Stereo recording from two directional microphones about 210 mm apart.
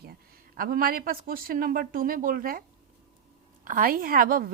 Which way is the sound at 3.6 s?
40° right (ahead or behind).